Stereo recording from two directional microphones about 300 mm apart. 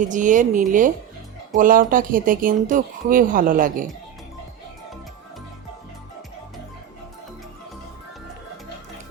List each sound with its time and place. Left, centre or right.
0.1 s speech: right